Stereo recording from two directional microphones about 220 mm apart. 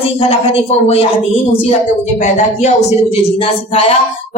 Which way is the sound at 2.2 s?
30° left (ahead or behind).